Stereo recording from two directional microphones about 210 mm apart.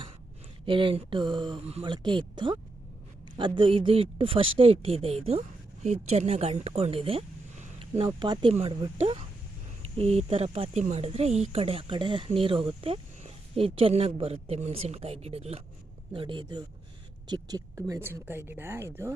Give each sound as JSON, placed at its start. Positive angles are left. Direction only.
{"t": 0.6, "sound": "speech", "side_deg": -25}